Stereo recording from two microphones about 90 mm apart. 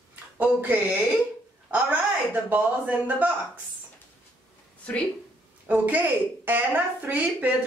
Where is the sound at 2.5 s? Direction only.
20° right (ahead or behind).